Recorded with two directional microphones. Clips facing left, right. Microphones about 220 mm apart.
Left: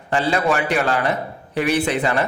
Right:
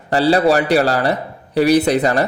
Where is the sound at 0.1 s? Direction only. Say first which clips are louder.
Right 6 dB; 35° right (ahead or behind).